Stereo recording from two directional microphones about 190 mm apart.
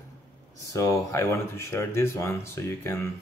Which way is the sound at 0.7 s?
15° left (ahead or behind).